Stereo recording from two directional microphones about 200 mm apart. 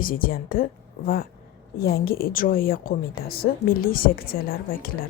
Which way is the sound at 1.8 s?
50° left (ahead or behind).